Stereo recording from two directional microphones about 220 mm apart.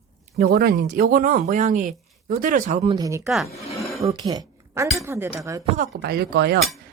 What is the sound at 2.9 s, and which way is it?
A woman's voice, 15° right (ahead or behind).